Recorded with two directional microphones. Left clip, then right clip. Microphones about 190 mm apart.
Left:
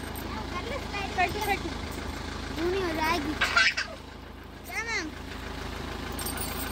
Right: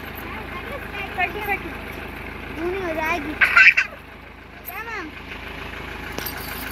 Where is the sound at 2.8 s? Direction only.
30° right (ahead or behind).